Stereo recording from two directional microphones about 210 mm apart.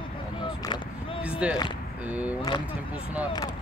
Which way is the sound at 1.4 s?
5° right (ahead or behind).